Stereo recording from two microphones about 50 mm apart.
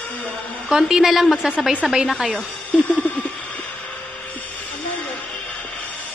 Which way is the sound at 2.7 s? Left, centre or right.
Left.